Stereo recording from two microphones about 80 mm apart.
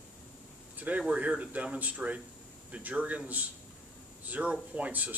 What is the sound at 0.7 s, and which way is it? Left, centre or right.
A man's voice, centre.